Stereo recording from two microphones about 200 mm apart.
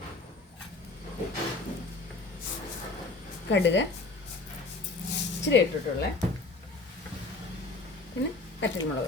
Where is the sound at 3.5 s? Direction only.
60° left (ahead or behind).